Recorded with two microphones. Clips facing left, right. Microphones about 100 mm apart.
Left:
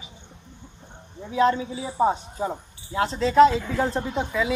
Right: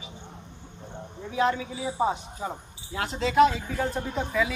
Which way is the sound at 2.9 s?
30° left (ahead or behind).